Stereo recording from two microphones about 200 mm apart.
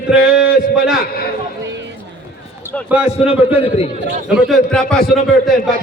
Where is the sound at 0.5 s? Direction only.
50° left (ahead or behind).